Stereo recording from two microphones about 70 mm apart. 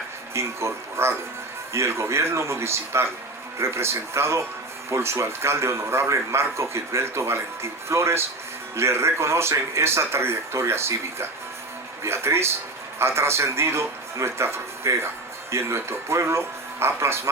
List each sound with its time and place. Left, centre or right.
0.3 s speech: right